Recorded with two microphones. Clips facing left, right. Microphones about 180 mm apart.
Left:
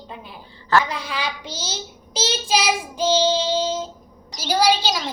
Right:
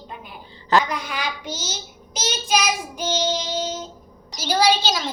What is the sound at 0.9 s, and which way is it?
Speech, 30° left (ahead or behind).